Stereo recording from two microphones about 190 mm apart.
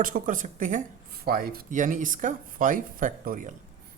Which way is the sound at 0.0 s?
45° right (ahead or behind).